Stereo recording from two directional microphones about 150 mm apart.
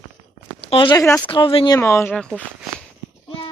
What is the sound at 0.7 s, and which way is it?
Speech, 35° left (ahead or behind).